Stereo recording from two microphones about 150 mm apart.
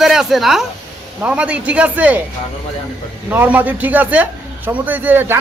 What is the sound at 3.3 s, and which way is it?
A man's voice, 10° right (ahead or behind).